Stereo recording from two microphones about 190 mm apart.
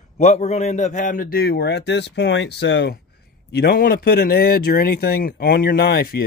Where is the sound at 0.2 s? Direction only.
35° left (ahead or behind); by 3.0 s 65° left (ahead or behind).